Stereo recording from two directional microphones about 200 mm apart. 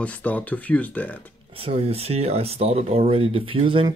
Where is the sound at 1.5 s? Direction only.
30° right (ahead or behind).